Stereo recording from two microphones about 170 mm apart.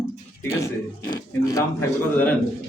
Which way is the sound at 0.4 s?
20° left (ahead or behind).